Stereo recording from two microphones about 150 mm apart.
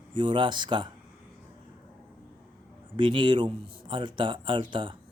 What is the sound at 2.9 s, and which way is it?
Speech, 30° right (ahead or behind).